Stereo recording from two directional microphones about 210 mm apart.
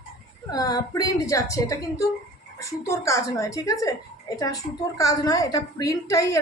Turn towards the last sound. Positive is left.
turn(degrees=15)  # may be behind; listen again after turning